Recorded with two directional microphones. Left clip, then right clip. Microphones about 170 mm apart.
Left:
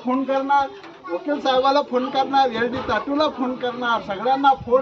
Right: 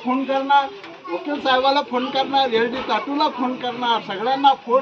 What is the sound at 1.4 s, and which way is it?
A man's voice, 10° left (ahead or behind).